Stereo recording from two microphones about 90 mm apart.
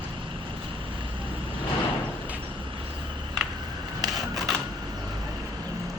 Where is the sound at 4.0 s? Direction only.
Centre (ahead or behind).